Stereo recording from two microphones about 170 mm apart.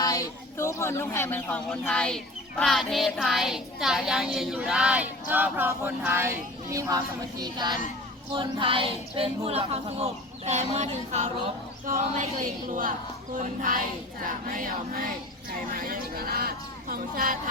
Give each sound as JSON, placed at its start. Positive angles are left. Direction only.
{"t": 0.0, "sound": "a child's voice", "side_deg": 20}
{"t": 13.3, "sound": "a sound", "side_deg": -50}
{"t": 15.4, "sound": "speech", "side_deg": -60}